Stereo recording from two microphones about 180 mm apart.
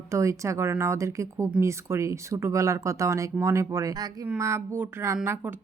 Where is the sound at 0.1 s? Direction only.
15° right (ahead or behind).